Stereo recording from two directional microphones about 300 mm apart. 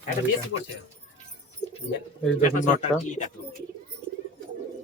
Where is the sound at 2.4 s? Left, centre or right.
Left.